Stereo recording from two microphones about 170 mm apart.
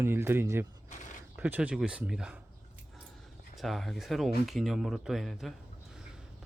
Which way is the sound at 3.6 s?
Centre (ahead or behind).